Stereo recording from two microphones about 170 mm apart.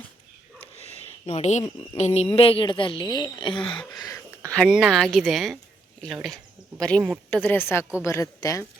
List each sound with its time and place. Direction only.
0.8 s a woman's voice: 40° left (ahead or behind); by 4.2 s 20° left (ahead or behind)
4.5 s a woman's voice: centre (ahead or behind); by 8.6 s 20° left (ahead or behind)